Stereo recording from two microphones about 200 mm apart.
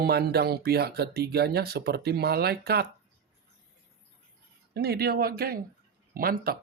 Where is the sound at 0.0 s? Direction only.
50° right (ahead or behind).